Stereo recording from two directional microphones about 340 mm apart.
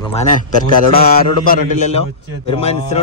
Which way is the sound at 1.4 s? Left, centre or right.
Left.